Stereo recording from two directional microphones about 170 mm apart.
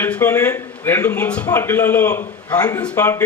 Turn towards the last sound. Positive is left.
turn(degrees=15)  # may be behind; listen again after turning